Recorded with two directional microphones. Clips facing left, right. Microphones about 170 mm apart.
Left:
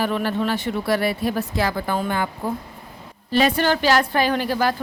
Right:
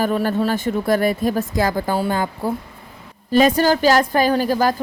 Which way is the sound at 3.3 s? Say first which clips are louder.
Right 4 dB; 45° right (ahead or behind).